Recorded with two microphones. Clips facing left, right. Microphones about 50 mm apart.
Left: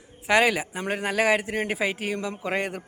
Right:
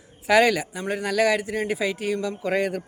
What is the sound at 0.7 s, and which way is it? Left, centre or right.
A man's voice, left.